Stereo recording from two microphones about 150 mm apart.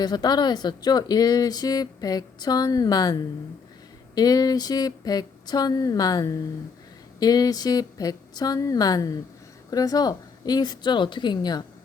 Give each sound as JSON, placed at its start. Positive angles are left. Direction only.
{"t": 0.0, "sound": "speech", "side_deg": 25}